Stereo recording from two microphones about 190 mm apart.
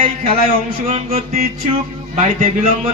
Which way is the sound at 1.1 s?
45° right (ahead or behind).